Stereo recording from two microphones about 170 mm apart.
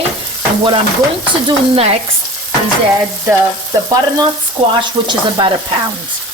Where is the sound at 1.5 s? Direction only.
35° right (ahead or behind).